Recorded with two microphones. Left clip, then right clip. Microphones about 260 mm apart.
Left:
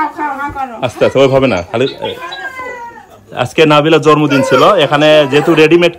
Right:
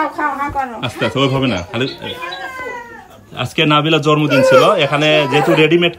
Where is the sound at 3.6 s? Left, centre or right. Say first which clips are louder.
Left 5 dB; left.